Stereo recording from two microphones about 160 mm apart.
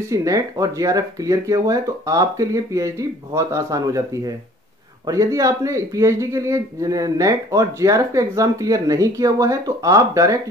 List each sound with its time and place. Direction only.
0.1 s speech: 20° right (ahead or behind)